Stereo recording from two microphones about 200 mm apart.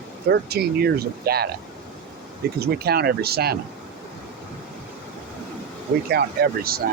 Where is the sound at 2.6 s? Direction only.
50° right (ahead or behind).